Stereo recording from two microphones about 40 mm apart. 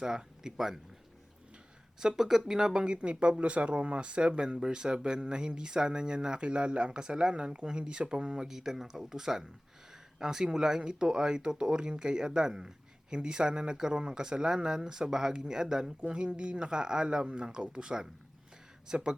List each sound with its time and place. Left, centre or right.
0.0 s speech: centre
2.0 s speech: centre